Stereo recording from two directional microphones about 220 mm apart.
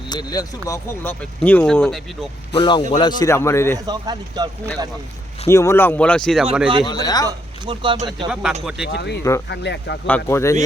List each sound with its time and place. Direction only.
0.1 s speech: 20° left (ahead or behind)
2.6 s speech: 20° left (ahead or behind)
3.8 s speech: 20° right (ahead or behind)
5.5 s speech: 10° left (ahead or behind)
6.8 s speech: 20° left (ahead or behind)
7.3 s speech: 20° right (ahead or behind)
8.3 s speech: centre (ahead or behind)
8.9 s speech: 50° left (ahead or behind)
10.1 s speech: 10° left (ahead or behind)